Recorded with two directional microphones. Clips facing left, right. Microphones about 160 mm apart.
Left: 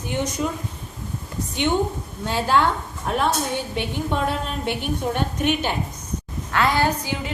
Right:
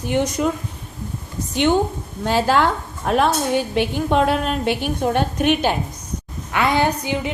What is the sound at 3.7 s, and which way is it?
A woman's voice, 80° right.